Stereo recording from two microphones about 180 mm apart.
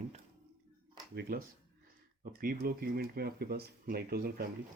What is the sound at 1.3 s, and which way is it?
Speech, 55° right (ahead or behind).